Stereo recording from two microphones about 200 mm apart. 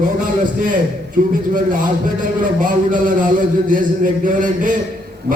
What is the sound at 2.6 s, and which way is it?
A man's voice, 40° right (ahead or behind).